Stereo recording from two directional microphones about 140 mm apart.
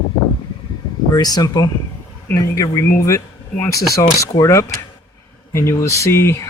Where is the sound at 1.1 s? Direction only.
30° left (ahead or behind).